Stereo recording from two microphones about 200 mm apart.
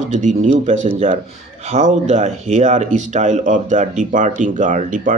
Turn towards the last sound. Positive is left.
turn(degrees=-40)  # may be behind; listen again after turning